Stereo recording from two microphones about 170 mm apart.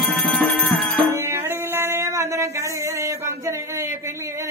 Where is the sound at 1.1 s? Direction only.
15° right (ahead or behind).